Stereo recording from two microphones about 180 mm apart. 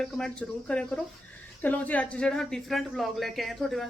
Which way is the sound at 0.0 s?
5° left (ahead or behind).